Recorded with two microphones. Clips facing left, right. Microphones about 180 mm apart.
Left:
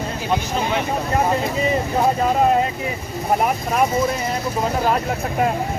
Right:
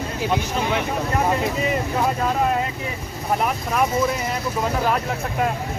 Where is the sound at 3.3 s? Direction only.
40° left (ahead or behind).